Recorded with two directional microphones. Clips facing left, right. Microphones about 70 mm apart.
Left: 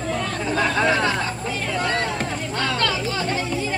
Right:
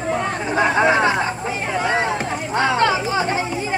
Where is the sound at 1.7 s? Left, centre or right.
Centre.